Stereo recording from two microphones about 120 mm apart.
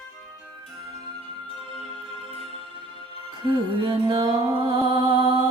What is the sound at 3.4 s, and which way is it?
Music, 40° right (ahead or behind).